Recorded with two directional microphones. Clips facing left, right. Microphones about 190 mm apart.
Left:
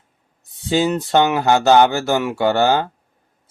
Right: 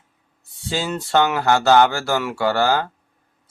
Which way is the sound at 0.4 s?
20° left (ahead or behind).